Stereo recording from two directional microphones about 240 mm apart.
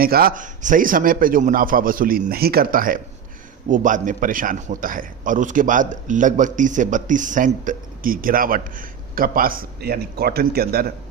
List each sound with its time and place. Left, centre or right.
0.0 s a man's voice: right